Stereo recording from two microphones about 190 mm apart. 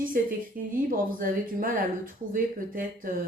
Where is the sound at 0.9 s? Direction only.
50° right (ahead or behind).